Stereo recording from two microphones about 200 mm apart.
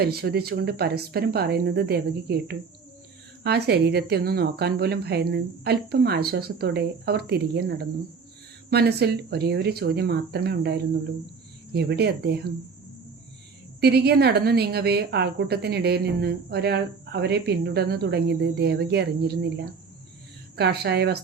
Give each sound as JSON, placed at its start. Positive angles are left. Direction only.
{"t": 0.0, "sound": "a woman's voice", "side_deg": -50}
{"t": 13.8, "sound": "a woman's voice", "side_deg": -55}
{"t": 20.6, "sound": "a woman's voice", "side_deg": -55}